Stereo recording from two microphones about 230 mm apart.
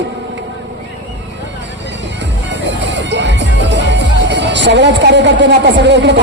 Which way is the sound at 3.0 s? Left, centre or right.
Right.